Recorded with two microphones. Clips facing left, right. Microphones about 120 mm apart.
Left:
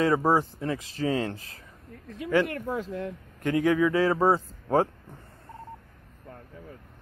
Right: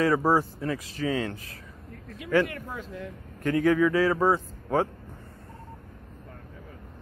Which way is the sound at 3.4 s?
15° left (ahead or behind).